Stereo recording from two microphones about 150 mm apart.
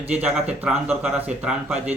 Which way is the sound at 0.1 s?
10° right (ahead or behind).